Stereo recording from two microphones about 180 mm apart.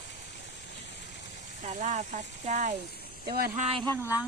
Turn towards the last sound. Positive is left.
turn(degrees=-10)  # may be behind; listen again after turning